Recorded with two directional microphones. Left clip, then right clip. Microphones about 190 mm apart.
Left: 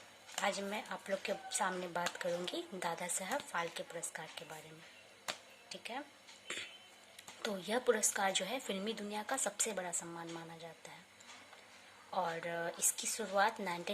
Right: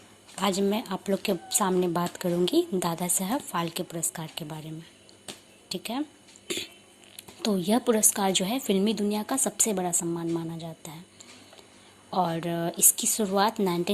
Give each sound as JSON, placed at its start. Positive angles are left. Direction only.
{"t": 0.4, "sound": "a woman's voice", "side_deg": -20}
{"t": 5.6, "sound": "speech", "side_deg": -25}
{"t": 7.2, "sound": "a woman's voice", "side_deg": -20}
{"t": 12.1, "sound": "a woman's voice", "side_deg": -20}